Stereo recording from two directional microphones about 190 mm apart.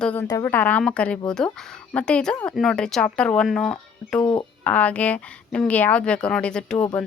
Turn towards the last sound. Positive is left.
turn(degrees=5)  # may be behind; listen again after turning